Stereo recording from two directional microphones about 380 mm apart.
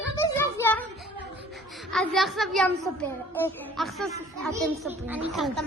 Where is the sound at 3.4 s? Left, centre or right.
Centre.